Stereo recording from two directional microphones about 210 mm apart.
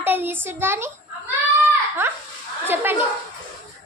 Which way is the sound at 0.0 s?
10° right (ahead or behind).